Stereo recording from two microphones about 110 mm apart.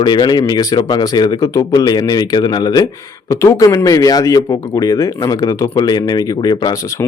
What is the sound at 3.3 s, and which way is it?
A man's voice, 30° left (ahead or behind).